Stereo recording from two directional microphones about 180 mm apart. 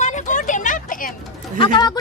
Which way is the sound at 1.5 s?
25° left (ahead or behind).